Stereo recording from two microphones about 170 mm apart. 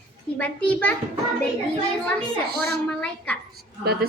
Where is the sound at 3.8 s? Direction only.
70° right (ahead or behind).